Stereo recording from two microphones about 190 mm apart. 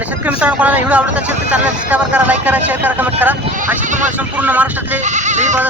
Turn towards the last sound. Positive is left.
turn(degrees=-40)  # may be behind; listen again after turning